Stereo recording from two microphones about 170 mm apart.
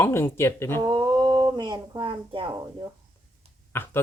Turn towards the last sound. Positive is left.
turn(degrees=15)  # may be behind; listen again after turning